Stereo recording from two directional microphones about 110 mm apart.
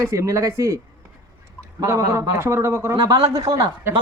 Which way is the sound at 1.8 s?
30° right (ahead or behind).